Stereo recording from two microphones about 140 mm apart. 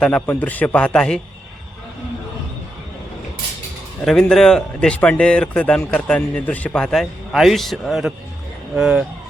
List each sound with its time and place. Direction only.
0.0 s speech: 10° left (ahead or behind)
4.0 s speech: 5° left (ahead or behind)